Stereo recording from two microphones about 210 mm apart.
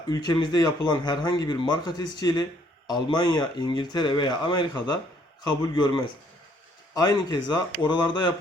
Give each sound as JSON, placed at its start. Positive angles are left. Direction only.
{"t": 0.1, "sound": "speech", "side_deg": 20}
{"t": 6.9, "sound": "speech", "side_deg": 20}